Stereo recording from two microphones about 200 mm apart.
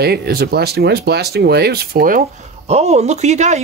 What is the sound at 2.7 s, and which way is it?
Speech, 30° right (ahead or behind).